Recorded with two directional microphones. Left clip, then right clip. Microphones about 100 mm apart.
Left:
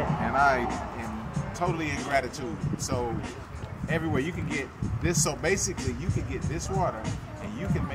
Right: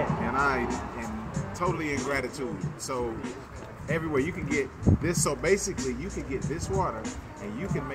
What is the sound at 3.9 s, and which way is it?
Speech, 35° left (ahead or behind).